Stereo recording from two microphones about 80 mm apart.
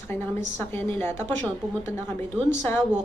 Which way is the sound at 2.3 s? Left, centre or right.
Left.